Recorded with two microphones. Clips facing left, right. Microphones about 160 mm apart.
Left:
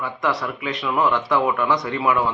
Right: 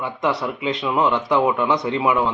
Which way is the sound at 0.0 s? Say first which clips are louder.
Right 2 dB; 25° right (ahead or behind).